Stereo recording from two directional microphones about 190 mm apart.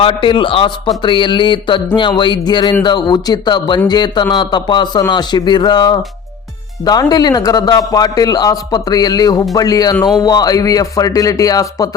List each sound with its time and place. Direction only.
0.0 s speech: 25° left (ahead or behind)